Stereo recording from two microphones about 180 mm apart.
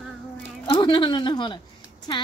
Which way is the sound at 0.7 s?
25° left (ahead or behind).